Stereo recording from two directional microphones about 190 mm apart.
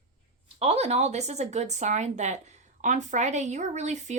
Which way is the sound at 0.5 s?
30° right (ahead or behind).